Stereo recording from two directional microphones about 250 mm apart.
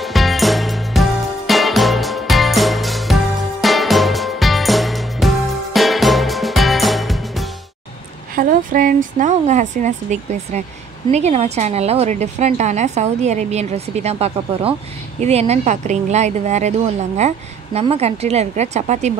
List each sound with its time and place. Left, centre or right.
0.0 s music: centre
8.4 s a woman's voice: right